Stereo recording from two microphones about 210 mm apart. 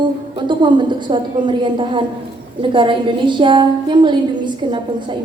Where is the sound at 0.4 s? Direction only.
20° right (ahead or behind).